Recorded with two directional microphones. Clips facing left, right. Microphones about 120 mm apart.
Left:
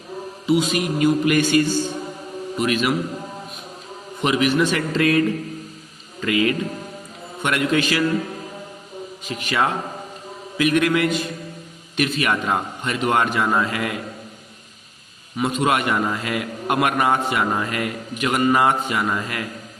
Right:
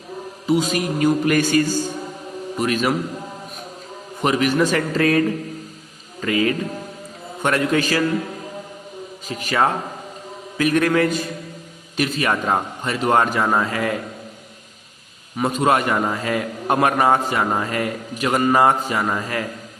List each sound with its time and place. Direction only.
0.4 s a man's voice: 40° right (ahead or behind)
4.2 s a man's voice: 40° right (ahead or behind)
6.2 s a man's voice: 35° right (ahead or behind)
9.2 s a man's voice: 40° right (ahead or behind)
15.4 s a man's voice: 35° right (ahead or behind)